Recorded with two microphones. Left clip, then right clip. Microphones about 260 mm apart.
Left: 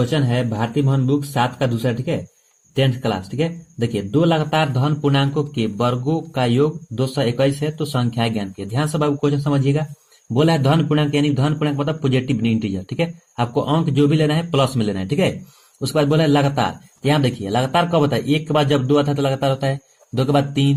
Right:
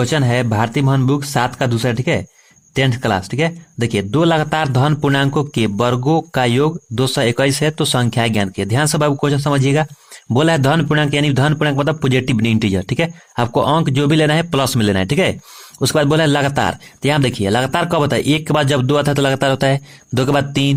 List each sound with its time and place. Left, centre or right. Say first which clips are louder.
0.0 s speech: right 4 dB; right